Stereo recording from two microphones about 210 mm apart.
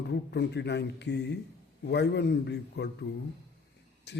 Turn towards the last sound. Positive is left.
turn(degrees=55)  # may be behind; listen again after turning